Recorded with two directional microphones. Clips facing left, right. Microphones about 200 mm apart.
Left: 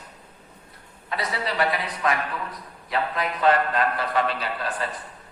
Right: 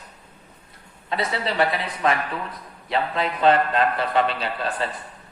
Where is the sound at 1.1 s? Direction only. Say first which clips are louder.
Right 3 dB; 25° right (ahead or behind).